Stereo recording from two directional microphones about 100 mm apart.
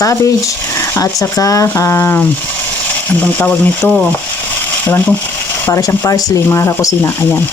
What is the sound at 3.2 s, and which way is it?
Speech, 15° left (ahead or behind).